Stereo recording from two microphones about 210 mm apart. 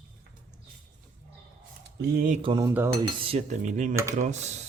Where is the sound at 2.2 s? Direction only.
40° right (ahead or behind).